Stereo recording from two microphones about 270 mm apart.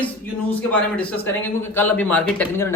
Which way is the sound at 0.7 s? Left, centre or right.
Centre.